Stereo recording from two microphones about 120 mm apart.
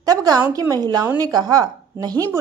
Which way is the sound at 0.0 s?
30° right (ahead or behind).